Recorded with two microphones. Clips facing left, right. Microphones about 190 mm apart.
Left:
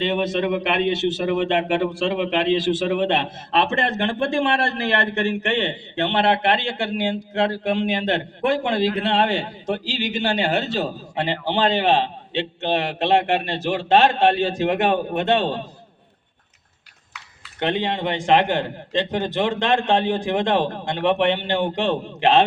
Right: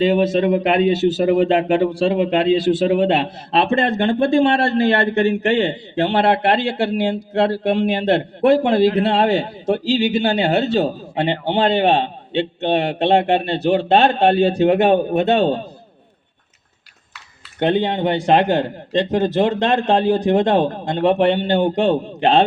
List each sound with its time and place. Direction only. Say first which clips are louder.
0.0 s a man's voice: right 6 dB; 40° right (ahead or behind)
17.8 s a man's voice: right 4 dB; 40° right (ahead or behind)